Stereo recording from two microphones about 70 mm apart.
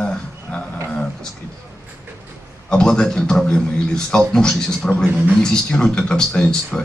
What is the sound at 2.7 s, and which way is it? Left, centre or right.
A man's voice, centre.